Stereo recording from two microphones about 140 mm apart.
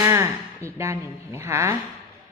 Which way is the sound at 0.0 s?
20° right (ahead or behind).